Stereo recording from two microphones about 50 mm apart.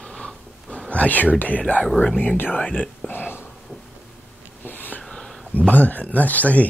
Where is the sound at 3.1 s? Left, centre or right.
Left.